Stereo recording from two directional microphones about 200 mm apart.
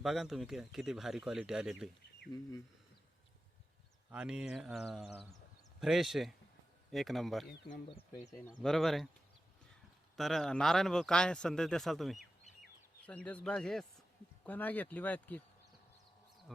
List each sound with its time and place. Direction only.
0.0 s speech: centre (ahead or behind)
4.1 s speech: 5° right (ahead or behind)
7.4 s speech: 50° left (ahead or behind)
7.9 s speech: 30° left (ahead or behind)
8.6 s speech: centre (ahead or behind)
10.2 s speech: centre (ahead or behind)